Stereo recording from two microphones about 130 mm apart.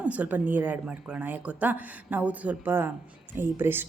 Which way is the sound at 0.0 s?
10° right (ahead or behind).